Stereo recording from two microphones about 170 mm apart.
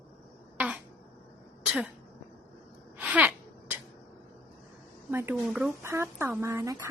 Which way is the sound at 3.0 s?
10° right (ahead or behind).